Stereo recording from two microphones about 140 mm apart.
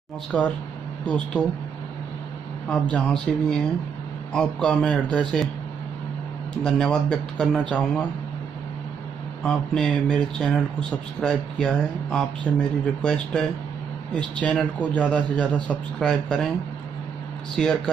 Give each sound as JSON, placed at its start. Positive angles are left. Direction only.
{"t": 0.3, "sound": "a man's voice", "side_deg": 5}
{"t": 2.7, "sound": "a man's voice", "side_deg": 10}
{"t": 6.6, "sound": "speech", "side_deg": 5}
{"t": 9.4, "sound": "a man's voice", "side_deg": 5}
{"t": 17.6, "sound": "speech", "side_deg": 5}